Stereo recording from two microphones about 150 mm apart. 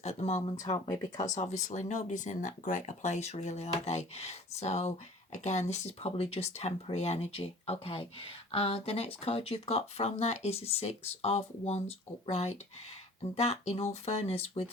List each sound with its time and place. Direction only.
0.0 s speech: 45° left (ahead or behind)
0.6 s speech: 25° left (ahead or behind)
1.2 s speech: 50° left (ahead or behind)